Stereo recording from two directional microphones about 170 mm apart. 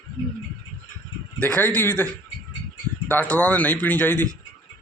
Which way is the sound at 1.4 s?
10° left (ahead or behind).